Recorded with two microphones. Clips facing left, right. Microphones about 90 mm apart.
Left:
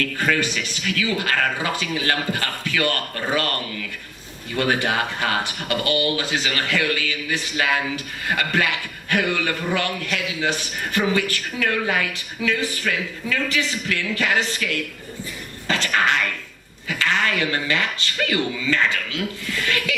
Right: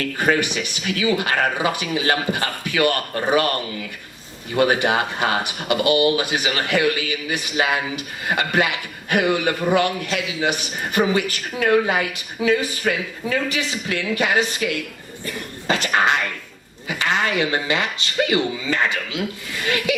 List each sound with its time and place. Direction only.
0.0 s speech: 20° right (ahead or behind)
4.5 s speech: 20° right (ahead or behind)